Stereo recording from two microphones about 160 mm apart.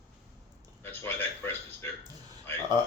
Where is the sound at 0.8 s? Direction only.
10° left (ahead or behind).